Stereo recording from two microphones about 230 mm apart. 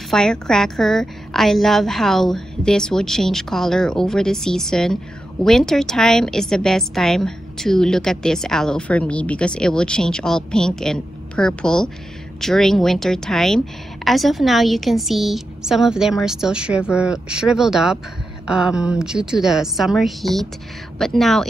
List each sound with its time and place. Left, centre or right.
0.1 s a woman's voice: centre